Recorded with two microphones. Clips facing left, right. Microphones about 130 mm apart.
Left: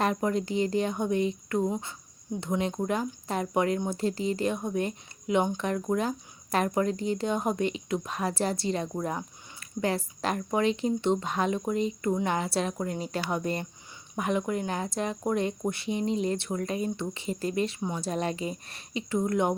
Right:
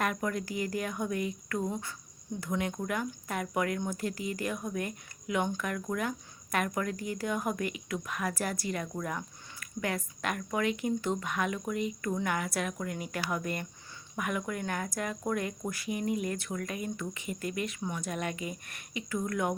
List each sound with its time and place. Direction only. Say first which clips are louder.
0.0 s speech: left 5 dB; 25° left (ahead or behind)